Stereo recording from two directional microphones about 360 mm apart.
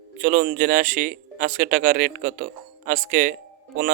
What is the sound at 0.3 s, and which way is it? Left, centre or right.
Speech, right.